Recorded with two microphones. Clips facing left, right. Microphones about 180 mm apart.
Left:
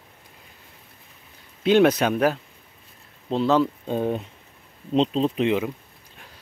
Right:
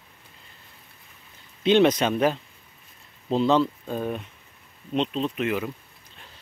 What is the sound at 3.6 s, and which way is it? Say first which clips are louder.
Speech: left 4 dB; 20° left (ahead or behind).